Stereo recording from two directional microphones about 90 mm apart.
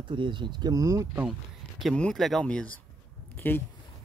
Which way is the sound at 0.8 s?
35° right (ahead or behind).